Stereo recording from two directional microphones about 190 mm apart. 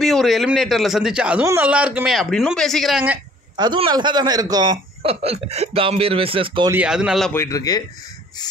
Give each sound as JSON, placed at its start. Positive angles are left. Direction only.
{"t": 0.0, "sound": "a man's voice", "side_deg": 0}
{"t": 3.5, "sound": "a man's voice", "side_deg": -25}
{"t": 6.7, "sound": "a man's voice", "side_deg": -5}
{"t": 7.3, "sound": "speech", "side_deg": 20}